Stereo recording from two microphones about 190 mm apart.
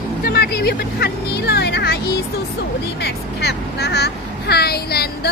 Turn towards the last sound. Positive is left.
turn(degrees=55)  # may be behind; listen again after turning